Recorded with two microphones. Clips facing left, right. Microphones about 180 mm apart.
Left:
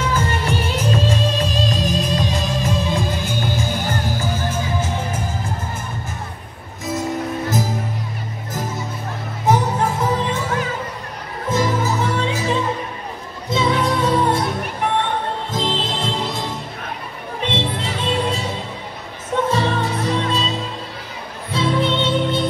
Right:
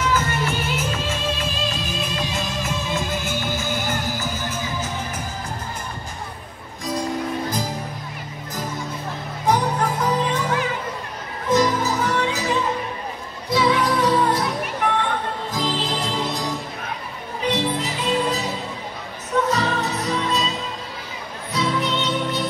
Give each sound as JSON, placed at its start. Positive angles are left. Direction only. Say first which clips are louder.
{"t": 0.0, "sound": "music", "louder": "left 1 dB", "side_deg": 30}
{"t": 6.9, "sound": "music", "louder": "left 2 dB", "side_deg": 25}
{"t": 9.5, "sound": "music", "louder": "left 2 dB", "side_deg": 25}
{"t": 11.5, "sound": "music", "louder": "right 1 dB", "side_deg": 25}
{"t": 15.5, "sound": "music", "louder": "left 1 dB", "side_deg": 25}
{"t": 19.5, "sound": "music", "louder": "left 2 dB", "side_deg": 30}